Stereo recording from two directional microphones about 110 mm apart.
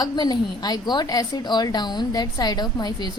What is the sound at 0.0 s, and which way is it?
A woman's voice, 40° left (ahead or behind).